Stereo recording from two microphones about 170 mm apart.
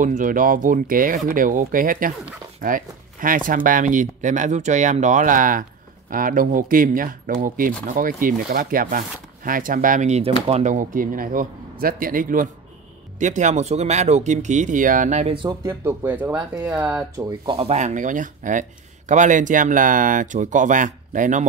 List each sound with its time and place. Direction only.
0.0 s speech: 50° right (ahead or behind)
15.6 s speech: 15° right (ahead or behind)
17.5 s speech: 35° right (ahead or behind)